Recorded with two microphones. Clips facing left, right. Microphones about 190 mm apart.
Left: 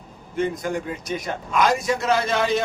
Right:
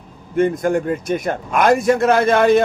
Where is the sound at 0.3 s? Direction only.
50° right (ahead or behind).